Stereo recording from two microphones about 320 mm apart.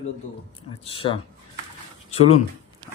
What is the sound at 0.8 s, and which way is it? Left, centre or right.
Speech, centre.